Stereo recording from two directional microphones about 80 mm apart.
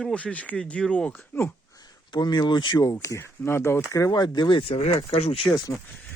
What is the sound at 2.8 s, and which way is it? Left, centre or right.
Speech, left.